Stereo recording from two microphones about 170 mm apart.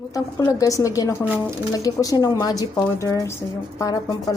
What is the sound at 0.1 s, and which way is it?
Speech, 20° left (ahead or behind).